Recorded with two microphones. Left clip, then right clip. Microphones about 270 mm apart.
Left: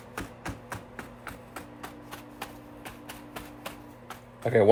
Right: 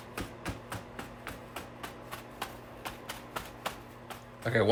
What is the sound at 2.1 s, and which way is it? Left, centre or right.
Typewriter, centre.